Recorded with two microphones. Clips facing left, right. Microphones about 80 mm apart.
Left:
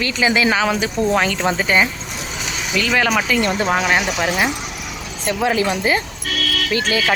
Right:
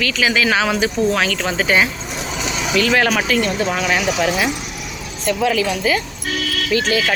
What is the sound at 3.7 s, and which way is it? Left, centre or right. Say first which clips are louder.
Speech: even; centre.